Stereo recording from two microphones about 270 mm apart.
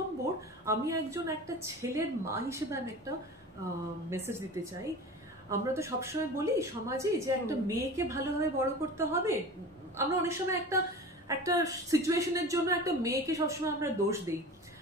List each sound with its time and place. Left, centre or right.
0.7 s a woman's voice: centre
4.1 s a woman's voice: centre
5.5 s a woman's voice: centre